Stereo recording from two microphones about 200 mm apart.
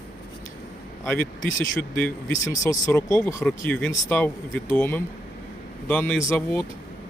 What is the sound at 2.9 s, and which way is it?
Speech, 15° left (ahead or behind).